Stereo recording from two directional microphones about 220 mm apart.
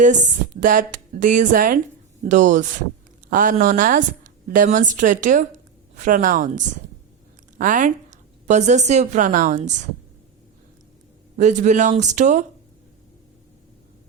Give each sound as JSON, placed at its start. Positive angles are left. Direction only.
{"t": 0.0, "sound": "a woman's voice", "side_deg": -35}
{"t": 11.3, "sound": "a woman's voice", "side_deg": -35}